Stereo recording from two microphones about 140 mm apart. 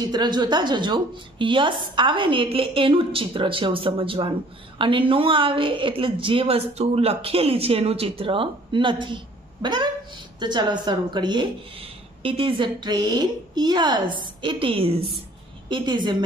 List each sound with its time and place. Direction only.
0.0 s a woman's voice: 30° right (ahead or behind)